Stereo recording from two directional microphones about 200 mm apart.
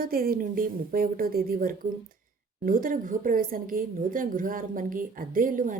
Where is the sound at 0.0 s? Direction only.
45° right (ahead or behind).